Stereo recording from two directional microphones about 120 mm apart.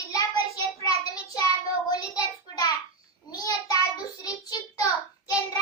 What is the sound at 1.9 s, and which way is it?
Child singing, 35° left (ahead or behind).